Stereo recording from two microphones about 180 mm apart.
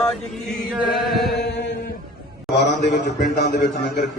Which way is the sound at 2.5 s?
70° left (ahead or behind).